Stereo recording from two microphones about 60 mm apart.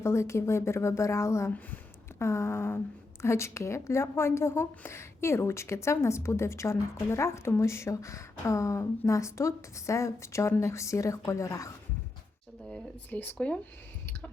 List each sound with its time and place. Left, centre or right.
0.0 s a woman's voice: left
13.1 s speech: left